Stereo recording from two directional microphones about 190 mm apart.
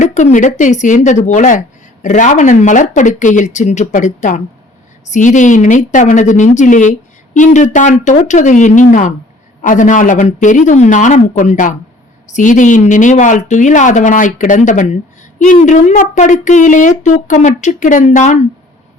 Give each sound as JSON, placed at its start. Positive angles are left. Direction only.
{"t": 0.0, "sound": "speech", "side_deg": 40}